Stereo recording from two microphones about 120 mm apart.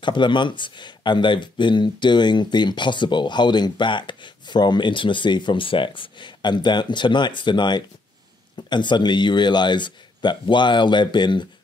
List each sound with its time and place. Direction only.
0.0 s speech: 40° left (ahead or behind)